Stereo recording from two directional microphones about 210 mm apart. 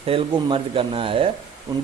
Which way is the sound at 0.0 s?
25° right (ahead or behind).